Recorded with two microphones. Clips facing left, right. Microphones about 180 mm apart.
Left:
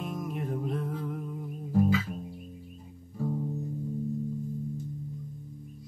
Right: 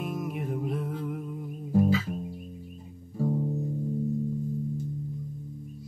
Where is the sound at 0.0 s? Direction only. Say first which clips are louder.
Right 2 dB; 5° right (ahead or behind).